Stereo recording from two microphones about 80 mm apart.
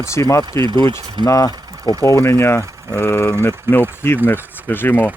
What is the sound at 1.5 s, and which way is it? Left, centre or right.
Speech, right.